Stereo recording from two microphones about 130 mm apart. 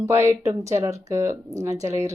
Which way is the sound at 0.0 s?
20° right (ahead or behind).